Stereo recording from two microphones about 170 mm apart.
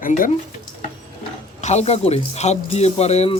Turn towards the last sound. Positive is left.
turn(degrees=40)  # may be behind; listen again after turning